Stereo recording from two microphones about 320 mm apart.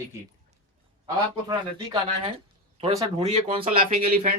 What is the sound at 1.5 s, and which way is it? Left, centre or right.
Speech, centre.